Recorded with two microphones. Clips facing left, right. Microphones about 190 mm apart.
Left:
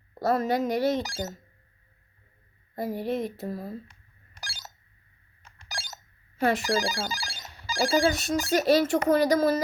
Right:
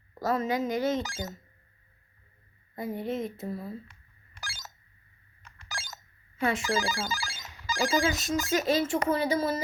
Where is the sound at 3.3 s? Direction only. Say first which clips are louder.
Left 2 dB; 40° left (ahead or behind).